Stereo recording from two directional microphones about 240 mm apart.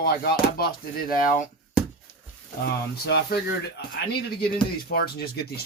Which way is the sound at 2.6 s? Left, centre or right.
Left.